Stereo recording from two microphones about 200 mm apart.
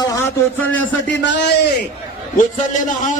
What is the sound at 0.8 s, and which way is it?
Speech, 65° left (ahead or behind).